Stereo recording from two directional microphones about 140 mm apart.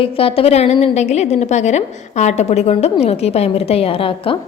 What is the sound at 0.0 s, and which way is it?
A woman's voice, 40° left (ahead or behind).